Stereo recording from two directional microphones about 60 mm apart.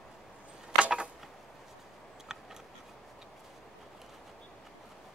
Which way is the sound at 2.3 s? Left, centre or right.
Centre.